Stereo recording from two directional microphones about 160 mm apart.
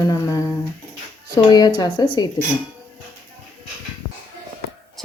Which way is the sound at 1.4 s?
25° left (ahead or behind).